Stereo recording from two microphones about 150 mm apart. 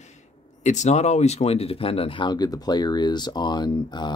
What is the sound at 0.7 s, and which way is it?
Speech, 50° left (ahead or behind).